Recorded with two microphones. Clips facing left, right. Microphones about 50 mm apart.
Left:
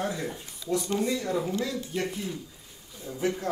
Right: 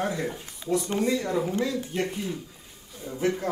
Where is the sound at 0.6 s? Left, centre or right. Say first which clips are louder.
Right 2 dB; right.